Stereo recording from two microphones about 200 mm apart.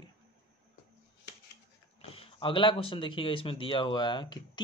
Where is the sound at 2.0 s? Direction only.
30° left (ahead or behind).